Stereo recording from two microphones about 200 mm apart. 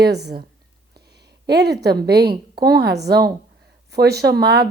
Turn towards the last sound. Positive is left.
turn(degrees=-55)  # may be behind; listen again after turning